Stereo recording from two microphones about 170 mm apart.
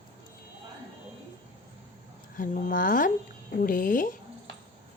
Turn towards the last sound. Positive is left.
turn(degrees=55)  # may be behind; listen again after turning